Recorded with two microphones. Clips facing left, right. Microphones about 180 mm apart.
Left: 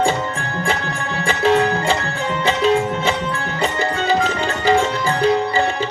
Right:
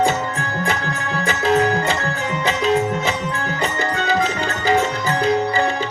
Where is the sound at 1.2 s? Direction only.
30° left (ahead or behind).